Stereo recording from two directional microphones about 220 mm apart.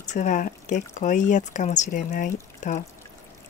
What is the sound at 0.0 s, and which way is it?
Speech, 35° left (ahead or behind).